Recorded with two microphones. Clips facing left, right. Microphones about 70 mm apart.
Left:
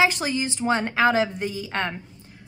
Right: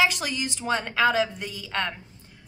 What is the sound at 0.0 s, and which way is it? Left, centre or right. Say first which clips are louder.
A woman's voice: left 3 dB; left.